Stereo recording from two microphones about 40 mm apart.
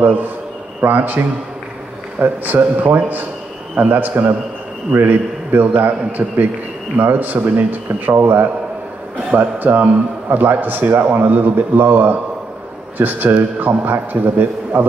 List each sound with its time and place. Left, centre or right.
0.0 s a man's voice: right
8.1 s a man's voice: right
9.4 s a man's voice: right
10.9 s a man's voice: right